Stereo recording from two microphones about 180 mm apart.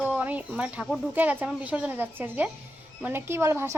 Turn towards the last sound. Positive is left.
turn(degrees=-15)  # may be behind; listen again after turning